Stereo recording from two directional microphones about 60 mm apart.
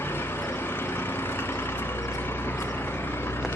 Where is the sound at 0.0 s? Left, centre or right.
Left.